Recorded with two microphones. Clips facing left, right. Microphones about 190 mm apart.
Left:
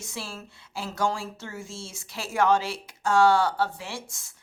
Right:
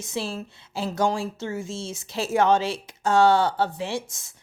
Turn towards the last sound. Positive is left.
turn(degrees=-20)  # may be behind; listen again after turning